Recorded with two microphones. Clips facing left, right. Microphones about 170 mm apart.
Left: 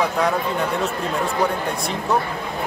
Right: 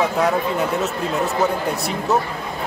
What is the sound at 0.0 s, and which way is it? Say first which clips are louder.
A man's voice: right 2 dB; 5° right (ahead or behind).